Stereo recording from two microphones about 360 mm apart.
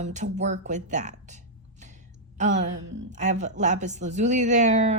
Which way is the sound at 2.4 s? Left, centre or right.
Right.